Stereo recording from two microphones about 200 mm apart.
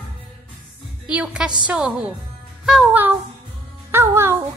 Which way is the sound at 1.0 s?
5° right (ahead or behind).